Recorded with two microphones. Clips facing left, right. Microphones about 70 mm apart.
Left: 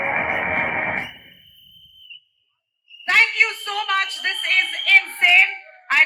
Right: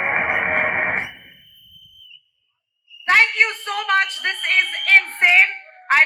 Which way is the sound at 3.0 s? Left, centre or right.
Right.